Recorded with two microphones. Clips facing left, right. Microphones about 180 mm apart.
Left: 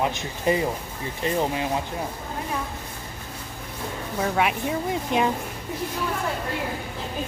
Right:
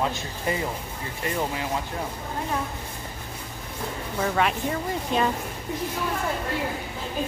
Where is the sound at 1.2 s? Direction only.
20° left (ahead or behind).